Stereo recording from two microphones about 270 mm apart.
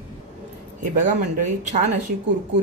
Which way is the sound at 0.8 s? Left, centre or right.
Right.